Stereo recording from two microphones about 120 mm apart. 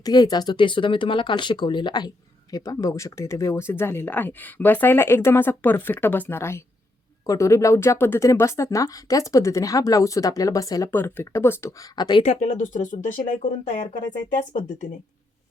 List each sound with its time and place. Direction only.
0.0 s speech: 35° left (ahead or behind)
10.9 s speech: 20° left (ahead or behind)
11.8 s speech: 35° left (ahead or behind)
12.2 s speech: 75° left (ahead or behind); by 14.8 s 90° left